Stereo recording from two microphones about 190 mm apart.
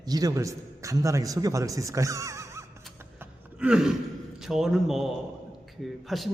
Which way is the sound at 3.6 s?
5° right (ahead or behind).